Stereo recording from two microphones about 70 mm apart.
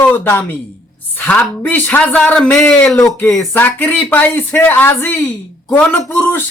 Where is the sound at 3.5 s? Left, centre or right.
Left.